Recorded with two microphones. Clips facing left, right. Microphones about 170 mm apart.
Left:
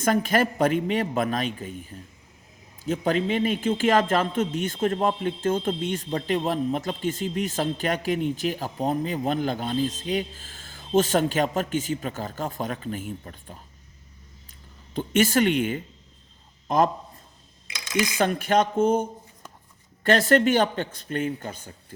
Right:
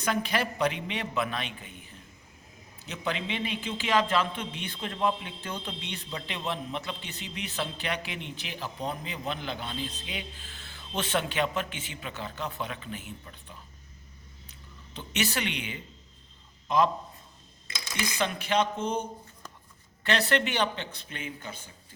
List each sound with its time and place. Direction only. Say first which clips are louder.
0.0 s a man's voice: left 7 dB; 45° left (ahead or behind)
14.9 s a man's voice: left 11 dB; 50° left (ahead or behind)
17.7 s a sound: left 8 dB; 15° left (ahead or behind)
18.2 s a man's voice: left 5 dB; 50° left (ahead or behind)
20.1 s a man's voice: left 8 dB; 45° left (ahead or behind)